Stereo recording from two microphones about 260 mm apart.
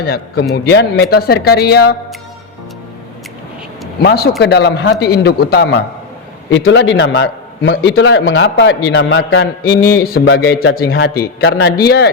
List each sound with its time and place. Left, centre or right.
0.0 s a man's voice: left
4.0 s a man's voice: left